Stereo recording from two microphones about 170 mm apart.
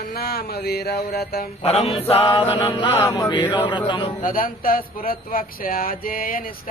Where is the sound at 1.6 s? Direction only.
35° left (ahead or behind).